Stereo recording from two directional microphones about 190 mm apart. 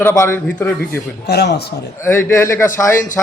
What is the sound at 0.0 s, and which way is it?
Speech, 15° left (ahead or behind).